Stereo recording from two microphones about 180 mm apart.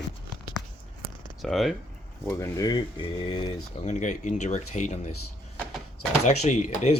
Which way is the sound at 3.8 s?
40° left (ahead or behind).